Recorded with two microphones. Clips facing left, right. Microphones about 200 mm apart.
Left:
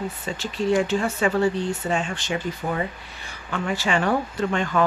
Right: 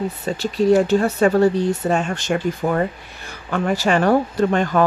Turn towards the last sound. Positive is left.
turn(degrees=-40)  # may be behind; listen again after turning